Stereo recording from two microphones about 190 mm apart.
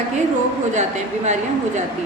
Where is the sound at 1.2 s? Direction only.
35° right (ahead or behind).